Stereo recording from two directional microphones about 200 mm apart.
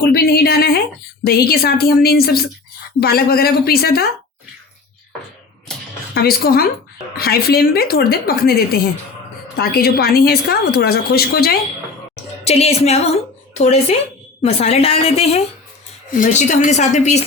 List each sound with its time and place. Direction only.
0.0 s a sound: 50° left (ahead or behind)
1.2 s a woman's voice: 50° left (ahead or behind)
6.1 s a woman's voice: 50° left (ahead or behind)
12.5 s a woman's voice: 30° left (ahead or behind)
14.4 s a woman's voice: 30° left (ahead or behind)